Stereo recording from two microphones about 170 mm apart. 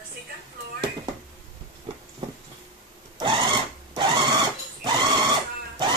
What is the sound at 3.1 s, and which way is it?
Sewing machine, 30° right (ahead or behind).